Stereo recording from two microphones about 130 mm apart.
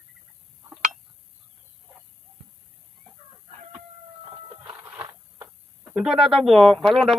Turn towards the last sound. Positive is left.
turn(degrees=0)  # may be behind; listen again after turning